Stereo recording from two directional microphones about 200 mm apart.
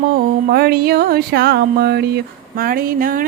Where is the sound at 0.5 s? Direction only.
50° right (ahead or behind).